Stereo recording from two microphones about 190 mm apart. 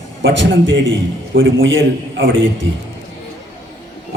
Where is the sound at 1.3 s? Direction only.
90° right.